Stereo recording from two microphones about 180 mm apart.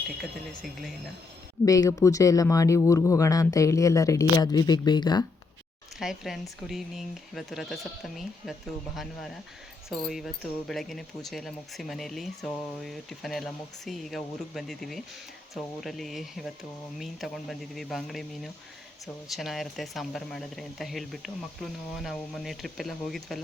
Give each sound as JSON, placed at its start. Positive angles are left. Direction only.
{"t": 0.2, "sound": "speech", "side_deg": 0}
{"t": 1.6, "sound": "speech", "side_deg": 20}
{"t": 6.0, "sound": "speech", "side_deg": 0}